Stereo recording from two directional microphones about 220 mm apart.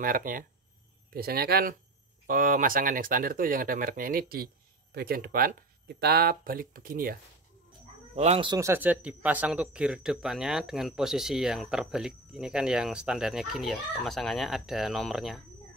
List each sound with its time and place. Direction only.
0.0 s speech: 40° right (ahead or behind)
8.2 s speech: 25° right (ahead or behind); by 15.4 s centre (ahead or behind)